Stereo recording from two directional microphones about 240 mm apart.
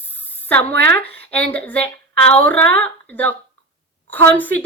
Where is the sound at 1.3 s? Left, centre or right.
Centre.